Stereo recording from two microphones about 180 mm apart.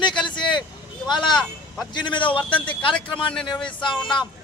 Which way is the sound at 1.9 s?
25° left (ahead or behind).